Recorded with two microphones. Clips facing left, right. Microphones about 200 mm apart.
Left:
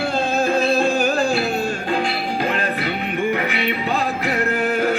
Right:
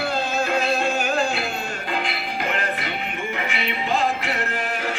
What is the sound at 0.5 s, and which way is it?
Music, 30° left (ahead or behind).